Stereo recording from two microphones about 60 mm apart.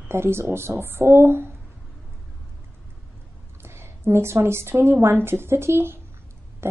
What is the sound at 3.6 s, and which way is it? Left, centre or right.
A woman's voice, right.